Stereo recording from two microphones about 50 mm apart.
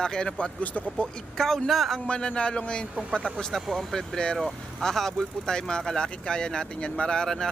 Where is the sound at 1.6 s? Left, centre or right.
Centre.